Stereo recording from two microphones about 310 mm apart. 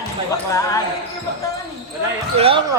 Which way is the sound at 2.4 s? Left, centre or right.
Centre.